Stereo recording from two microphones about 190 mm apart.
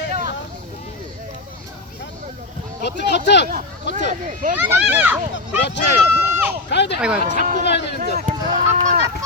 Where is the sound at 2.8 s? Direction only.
65° left (ahead or behind).